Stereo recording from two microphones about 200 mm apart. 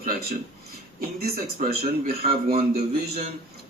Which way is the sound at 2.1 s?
30° right (ahead or behind).